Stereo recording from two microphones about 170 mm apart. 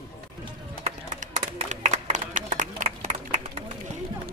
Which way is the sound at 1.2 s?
50° right (ahead or behind).